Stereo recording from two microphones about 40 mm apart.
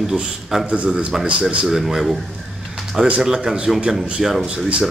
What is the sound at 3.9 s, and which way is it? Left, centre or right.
Speech, centre.